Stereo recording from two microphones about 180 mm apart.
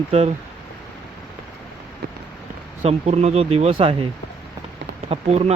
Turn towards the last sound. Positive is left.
turn(degrees=-35)  # may be behind; listen again after turning